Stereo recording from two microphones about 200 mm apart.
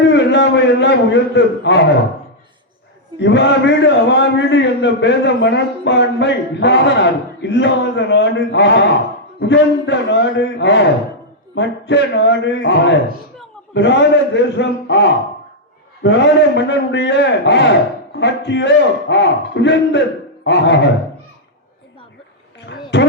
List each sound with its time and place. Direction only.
0.1 s a man's voice: 60° left (ahead or behind)
3.2 s a man's voice: 60° left (ahead or behind)
22.9 s a sound: 60° left (ahead or behind)